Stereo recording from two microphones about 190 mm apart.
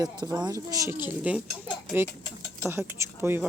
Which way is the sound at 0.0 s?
20° right (ahead or behind).